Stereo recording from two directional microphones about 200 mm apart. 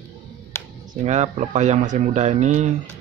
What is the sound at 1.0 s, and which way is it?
Speech, 35° right (ahead or behind).